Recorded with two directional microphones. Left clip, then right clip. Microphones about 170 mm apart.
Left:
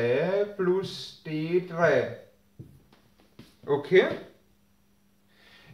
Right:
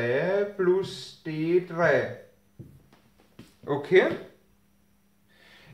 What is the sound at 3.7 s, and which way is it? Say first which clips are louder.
Speech: even; 35° right (ahead or behind).